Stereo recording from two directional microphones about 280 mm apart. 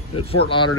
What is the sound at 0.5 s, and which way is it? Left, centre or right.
Speech, centre.